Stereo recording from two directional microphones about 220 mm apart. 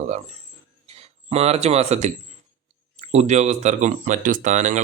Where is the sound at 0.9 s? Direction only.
30° right (ahead or behind).